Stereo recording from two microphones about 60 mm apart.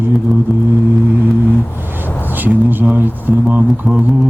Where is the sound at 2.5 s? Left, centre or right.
Right.